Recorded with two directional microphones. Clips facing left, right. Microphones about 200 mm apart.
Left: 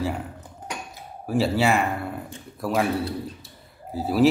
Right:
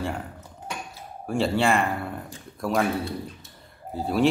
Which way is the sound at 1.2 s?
5° left (ahead or behind).